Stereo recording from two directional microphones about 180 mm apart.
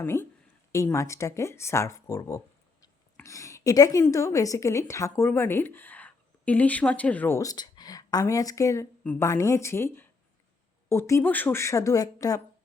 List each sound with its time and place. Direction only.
0.0 s a woman's voice: 10° left (ahead or behind)